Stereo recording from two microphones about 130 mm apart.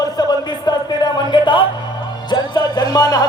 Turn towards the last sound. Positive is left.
turn(degrees=30)  # may be behind; listen again after turning